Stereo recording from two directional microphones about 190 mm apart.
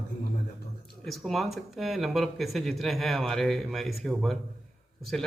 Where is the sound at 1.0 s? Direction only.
Centre (ahead or behind).